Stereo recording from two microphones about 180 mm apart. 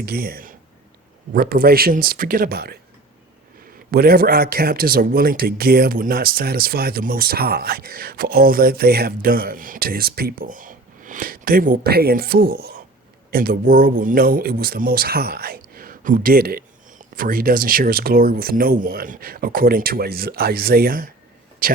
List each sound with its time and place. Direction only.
0.0 s a man's voice: 55° right (ahead or behind)
3.9 s a man's voice: 55° right (ahead or behind)